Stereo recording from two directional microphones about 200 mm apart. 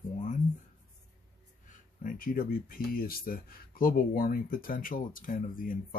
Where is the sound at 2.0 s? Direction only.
45° left (ahead or behind).